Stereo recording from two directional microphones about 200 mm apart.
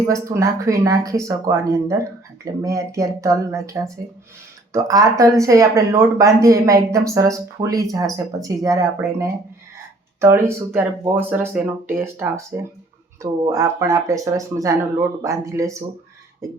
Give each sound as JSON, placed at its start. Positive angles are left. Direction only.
{"t": 0.1, "sound": "speech", "side_deg": -15}